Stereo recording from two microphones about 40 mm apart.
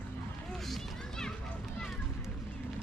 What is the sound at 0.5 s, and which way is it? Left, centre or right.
Children playing, centre.